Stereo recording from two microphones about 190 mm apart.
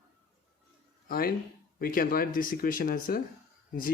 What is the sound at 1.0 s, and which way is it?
Speech, 50° left (ahead or behind).